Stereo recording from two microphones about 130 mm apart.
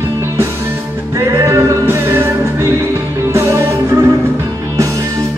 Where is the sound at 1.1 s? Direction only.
20° right (ahead or behind).